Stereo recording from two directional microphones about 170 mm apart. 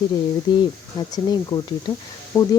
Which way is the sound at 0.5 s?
25° left (ahead or behind).